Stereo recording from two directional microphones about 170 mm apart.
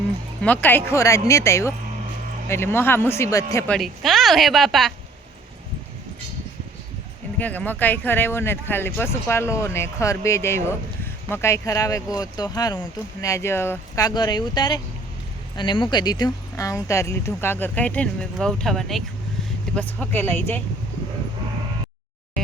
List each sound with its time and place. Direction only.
0.4 s speech: 10° left (ahead or behind)
3.7 s speech: centre (ahead or behind)
7.3 s speech: 10° left (ahead or behind)